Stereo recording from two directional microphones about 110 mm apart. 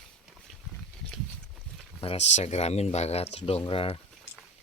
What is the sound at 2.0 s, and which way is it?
Speech, 75° left (ahead or behind).